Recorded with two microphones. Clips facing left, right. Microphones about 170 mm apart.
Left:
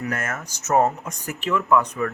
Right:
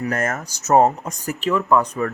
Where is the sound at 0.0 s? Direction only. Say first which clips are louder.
Right 5 dB; 40° right (ahead or behind).